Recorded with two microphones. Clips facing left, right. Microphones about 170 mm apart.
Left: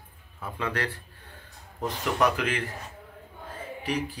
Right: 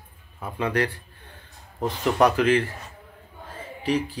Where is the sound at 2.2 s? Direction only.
30° right (ahead or behind).